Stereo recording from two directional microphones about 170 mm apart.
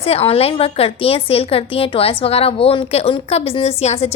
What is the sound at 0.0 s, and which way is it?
A woman's voice, 35° left (ahead or behind).